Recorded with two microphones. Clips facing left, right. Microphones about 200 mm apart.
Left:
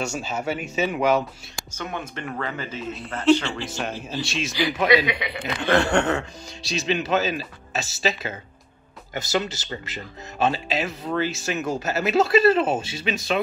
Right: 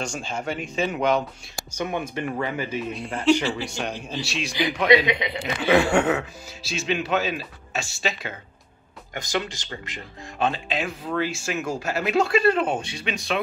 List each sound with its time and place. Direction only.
0.0 s speech: 5° left (ahead or behind)
1.8 s speech: 15° right (ahead or behind)
4.8 s a man's voice: 20° right (ahead or behind)
5.6 s speech: 5° right (ahead or behind)